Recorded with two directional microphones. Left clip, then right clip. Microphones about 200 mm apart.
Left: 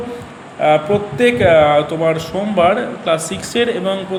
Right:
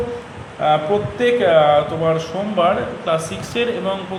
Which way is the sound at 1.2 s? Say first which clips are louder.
Left 3 dB; 40° left (ahead or behind).